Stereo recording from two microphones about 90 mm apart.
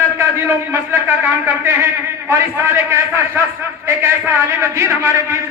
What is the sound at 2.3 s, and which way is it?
A man's voice, 30° right (ahead or behind).